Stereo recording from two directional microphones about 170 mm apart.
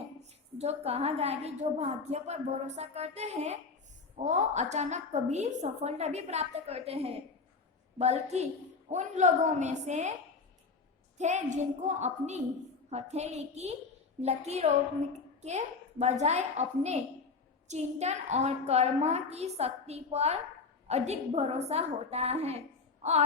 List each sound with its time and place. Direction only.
0.6 s a woman's voice: 40° right (ahead or behind)
11.2 s a woman's voice: 45° right (ahead or behind)